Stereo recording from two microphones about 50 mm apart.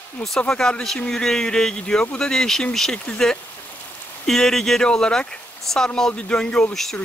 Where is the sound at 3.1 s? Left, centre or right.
Left.